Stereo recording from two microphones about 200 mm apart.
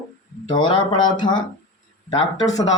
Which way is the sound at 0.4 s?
20° left (ahead or behind).